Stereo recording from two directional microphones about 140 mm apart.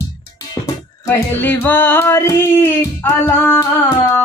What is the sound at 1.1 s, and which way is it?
Music, 15° left (ahead or behind).